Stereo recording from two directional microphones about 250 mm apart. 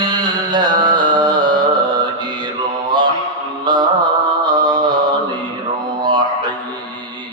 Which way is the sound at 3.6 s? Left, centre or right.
Centre.